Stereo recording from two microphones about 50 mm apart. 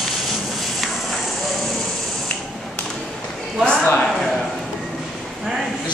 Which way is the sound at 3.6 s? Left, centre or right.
Centre.